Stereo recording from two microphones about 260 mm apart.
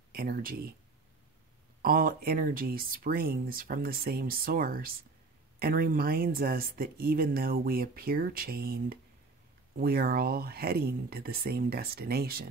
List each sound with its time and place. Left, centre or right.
0.1 s speech: right
1.8 s speech: right